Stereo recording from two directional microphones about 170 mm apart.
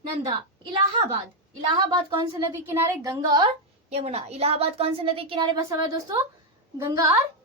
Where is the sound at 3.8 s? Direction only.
35° right (ahead or behind); by 7.1 s 15° right (ahead or behind).